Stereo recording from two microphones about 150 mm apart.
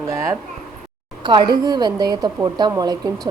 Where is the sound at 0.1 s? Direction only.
20° right (ahead or behind).